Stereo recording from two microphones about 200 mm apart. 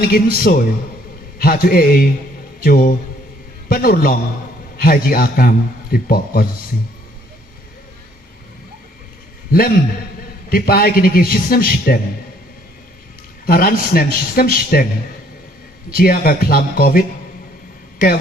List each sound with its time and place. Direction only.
0.0 s a man's voice: 50° left (ahead or behind)
9.5 s a man's voice: 50° left (ahead or behind)
13.4 s a man's voice: 45° left (ahead or behind)
15.9 s a man's voice: 45° left (ahead or behind)